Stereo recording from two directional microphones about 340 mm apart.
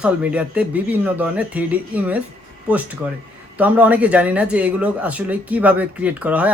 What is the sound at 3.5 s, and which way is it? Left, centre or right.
Speech, centre.